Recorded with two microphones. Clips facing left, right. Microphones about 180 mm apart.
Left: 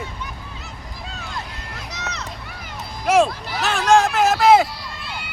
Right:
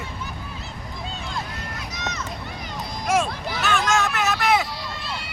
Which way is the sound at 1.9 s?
70° left (ahead or behind).